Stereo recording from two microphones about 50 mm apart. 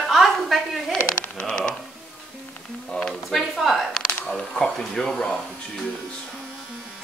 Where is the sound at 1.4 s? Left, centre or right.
Left.